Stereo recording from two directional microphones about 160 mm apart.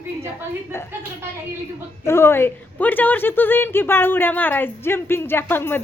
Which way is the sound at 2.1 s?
15° left (ahead or behind).